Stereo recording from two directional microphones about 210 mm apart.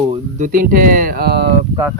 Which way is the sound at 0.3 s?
40° right (ahead or behind).